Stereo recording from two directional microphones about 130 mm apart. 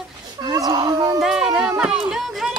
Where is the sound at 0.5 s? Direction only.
30° right (ahead or behind).